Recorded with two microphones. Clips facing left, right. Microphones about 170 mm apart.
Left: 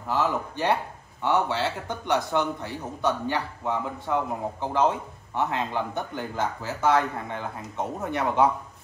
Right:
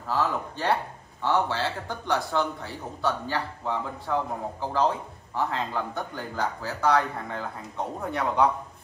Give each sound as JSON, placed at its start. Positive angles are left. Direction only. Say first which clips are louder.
{"t": 0.1, "sound": "a man's voice", "louder": "left 1 dB", "side_deg": 20}
{"t": 1.9, "sound": "a man's voice", "louder": "left 2 dB", "side_deg": 20}